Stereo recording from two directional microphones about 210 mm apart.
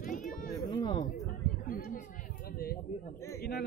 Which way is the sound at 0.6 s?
20° left (ahead or behind).